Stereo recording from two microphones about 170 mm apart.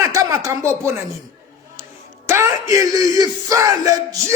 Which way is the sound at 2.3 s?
15° right (ahead or behind).